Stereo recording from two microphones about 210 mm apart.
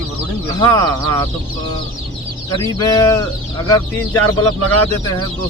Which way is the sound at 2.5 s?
20° left (ahead or behind).